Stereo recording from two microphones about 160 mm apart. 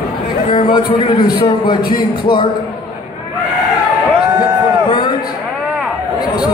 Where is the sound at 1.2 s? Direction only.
30° left (ahead or behind).